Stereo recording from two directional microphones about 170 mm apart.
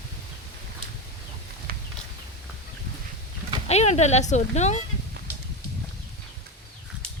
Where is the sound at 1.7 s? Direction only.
65° right (ahead or behind).